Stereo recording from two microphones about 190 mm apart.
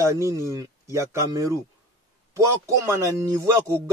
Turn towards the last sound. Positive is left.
turn(degrees=-15)  # may be behind; listen again after turning